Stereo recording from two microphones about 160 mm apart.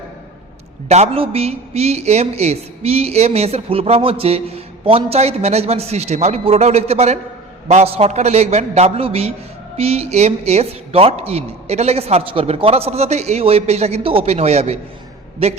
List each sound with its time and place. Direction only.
0.9 s a man's voice: 45° right (ahead or behind)